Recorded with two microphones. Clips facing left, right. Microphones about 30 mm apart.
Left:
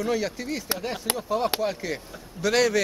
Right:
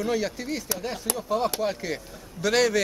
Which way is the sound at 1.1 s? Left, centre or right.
Left.